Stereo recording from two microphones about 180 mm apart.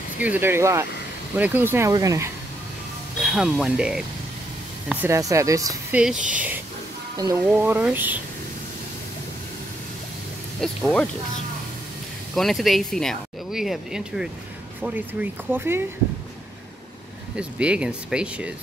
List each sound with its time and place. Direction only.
0.2 s speech: 10° right (ahead or behind)
3.2 s speech: centre (ahead or behind); by 5.9 s 20° right (ahead or behind)
5.9 s speech: 5° right (ahead or behind)
7.2 s speech: 20° right (ahead or behind)
10.6 s speech: 5° left (ahead or behind)
12.4 s speech: centre (ahead or behind)
17.4 s speech: 5° right (ahead or behind)